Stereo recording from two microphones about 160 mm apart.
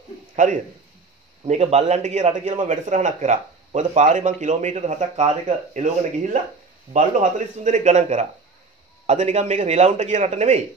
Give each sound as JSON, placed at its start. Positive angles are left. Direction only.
{"t": 0.4, "sound": "a man's voice", "side_deg": -50}